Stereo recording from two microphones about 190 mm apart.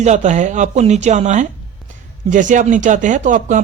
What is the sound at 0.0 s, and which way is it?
Speech, 40° right (ahead or behind).